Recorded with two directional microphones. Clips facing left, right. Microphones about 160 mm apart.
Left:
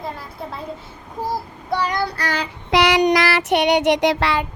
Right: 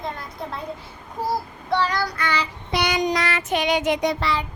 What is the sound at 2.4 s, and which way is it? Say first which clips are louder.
Child singing: left 7 dB; 90° left.